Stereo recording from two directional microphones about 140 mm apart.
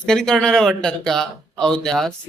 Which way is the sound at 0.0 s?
5° left (ahead or behind).